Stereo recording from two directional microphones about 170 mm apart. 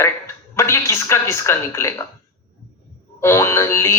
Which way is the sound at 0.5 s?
15° left (ahead or behind).